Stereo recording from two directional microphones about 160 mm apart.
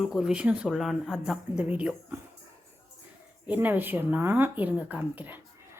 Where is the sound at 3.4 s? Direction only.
10° right (ahead or behind).